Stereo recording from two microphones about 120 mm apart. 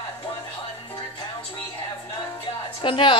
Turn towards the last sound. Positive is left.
turn(degrees=45)  # may be behind; listen again after turning